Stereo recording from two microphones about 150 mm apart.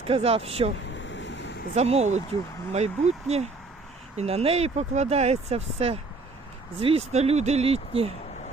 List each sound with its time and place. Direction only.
0.0 s speech: 40° right (ahead or behind)
1.7 s speech: 45° right (ahead or behind)